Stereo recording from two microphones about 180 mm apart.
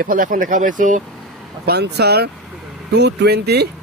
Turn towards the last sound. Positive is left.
turn(degrees=-65)  # may be behind; listen again after turning